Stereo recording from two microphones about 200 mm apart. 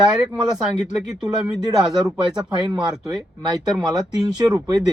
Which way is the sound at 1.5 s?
20° right (ahead or behind).